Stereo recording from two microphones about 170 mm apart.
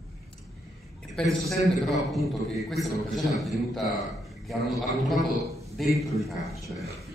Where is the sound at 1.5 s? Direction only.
Centre (ahead or behind).